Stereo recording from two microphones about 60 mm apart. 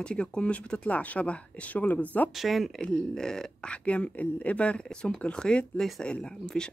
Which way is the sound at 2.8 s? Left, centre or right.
Centre.